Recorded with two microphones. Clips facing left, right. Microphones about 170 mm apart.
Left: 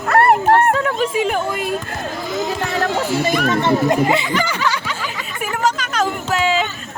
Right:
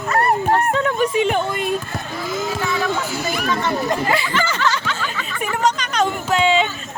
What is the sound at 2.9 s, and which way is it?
Music, 30° left (ahead or behind).